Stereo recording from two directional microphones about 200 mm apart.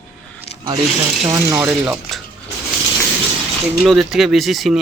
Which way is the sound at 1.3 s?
20° right (ahead or behind).